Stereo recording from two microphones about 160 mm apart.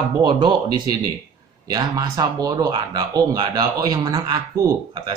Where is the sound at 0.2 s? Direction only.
30° right (ahead or behind).